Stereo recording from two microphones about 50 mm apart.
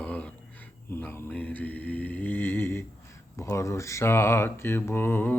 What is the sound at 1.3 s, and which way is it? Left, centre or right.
Mantra, left.